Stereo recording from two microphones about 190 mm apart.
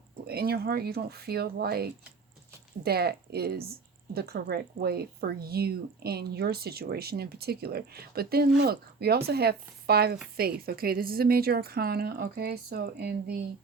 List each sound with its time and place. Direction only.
0.3 s a woman's voice: 55° right (ahead or behind)